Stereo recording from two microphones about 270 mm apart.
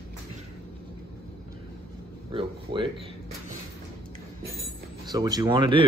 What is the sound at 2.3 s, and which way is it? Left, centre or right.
Speech, centre.